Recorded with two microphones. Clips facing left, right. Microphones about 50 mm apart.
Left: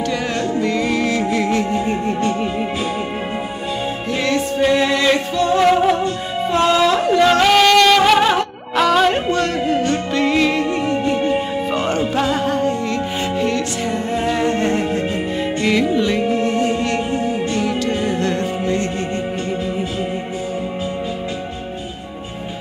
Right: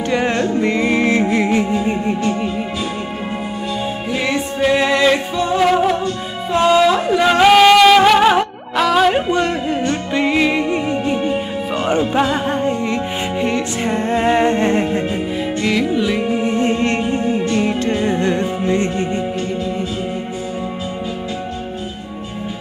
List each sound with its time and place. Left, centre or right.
0.0 s music: right
4.1 s music: centre
5.6 s music: centre
9.3 s music: centre
11.2 s music: centre
11.9 s music: right
13.9 s music: right
15.6 s music: centre
16.4 s music: right